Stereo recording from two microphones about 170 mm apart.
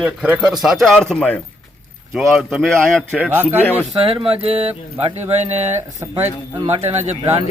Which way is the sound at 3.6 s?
10° left (ahead or behind).